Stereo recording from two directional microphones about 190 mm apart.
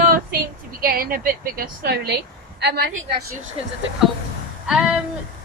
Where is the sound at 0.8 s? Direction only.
50° right (ahead or behind).